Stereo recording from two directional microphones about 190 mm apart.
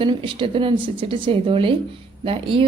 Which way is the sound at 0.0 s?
25° right (ahead or behind).